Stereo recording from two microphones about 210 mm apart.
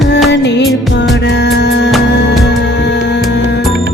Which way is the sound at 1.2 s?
55° left (ahead or behind).